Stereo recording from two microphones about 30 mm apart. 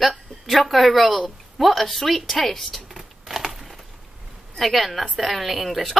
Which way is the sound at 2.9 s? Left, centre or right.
Centre.